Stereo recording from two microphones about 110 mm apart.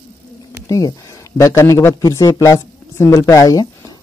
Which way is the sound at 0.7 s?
30° left (ahead or behind).